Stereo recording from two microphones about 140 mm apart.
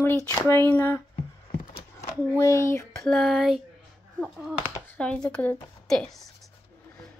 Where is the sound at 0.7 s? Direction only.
15° left (ahead or behind).